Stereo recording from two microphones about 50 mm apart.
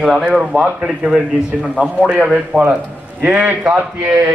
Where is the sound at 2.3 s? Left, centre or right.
Right.